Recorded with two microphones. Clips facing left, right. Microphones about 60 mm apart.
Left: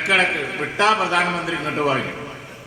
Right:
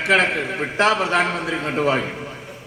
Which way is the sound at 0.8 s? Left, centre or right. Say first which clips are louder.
Even; right.